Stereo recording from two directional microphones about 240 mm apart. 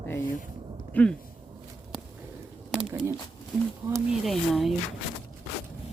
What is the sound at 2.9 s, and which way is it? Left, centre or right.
Speech, centre.